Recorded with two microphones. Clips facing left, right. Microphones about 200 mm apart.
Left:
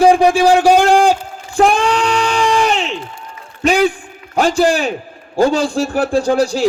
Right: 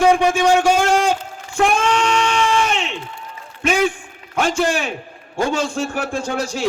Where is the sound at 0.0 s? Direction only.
35° left (ahead or behind).